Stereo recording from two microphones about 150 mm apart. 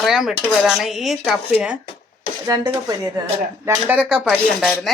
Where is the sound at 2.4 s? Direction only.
25° right (ahead or behind).